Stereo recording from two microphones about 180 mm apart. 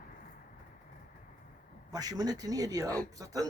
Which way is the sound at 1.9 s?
20° right (ahead or behind).